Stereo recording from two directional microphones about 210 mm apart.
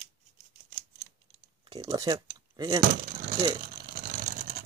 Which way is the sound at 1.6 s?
20° right (ahead or behind).